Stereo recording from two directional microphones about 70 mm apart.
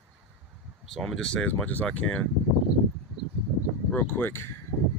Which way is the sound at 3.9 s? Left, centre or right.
Left.